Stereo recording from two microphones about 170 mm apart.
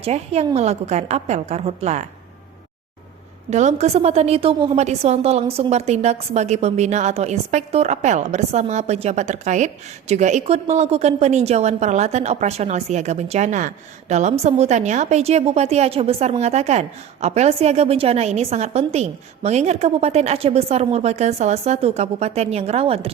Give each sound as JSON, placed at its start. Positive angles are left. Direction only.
{"t": 0.0, "sound": "a woman's voice", "side_deg": -40}
{"t": 3.5, "sound": "a woman's voice", "side_deg": -40}